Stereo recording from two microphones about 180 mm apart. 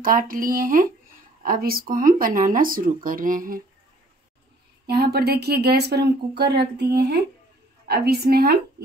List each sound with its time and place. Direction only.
0.0 s speech: 50° right (ahead or behind)
4.8 s a woman's voice: 60° right (ahead or behind)